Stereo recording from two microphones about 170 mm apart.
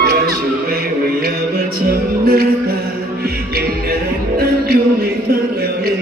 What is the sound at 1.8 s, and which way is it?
Music, 65° right (ahead or behind).